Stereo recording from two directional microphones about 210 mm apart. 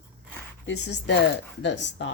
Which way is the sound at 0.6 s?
55° left (ahead or behind).